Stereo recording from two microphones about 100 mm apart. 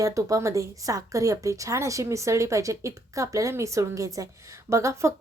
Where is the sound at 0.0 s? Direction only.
35° right (ahead or behind).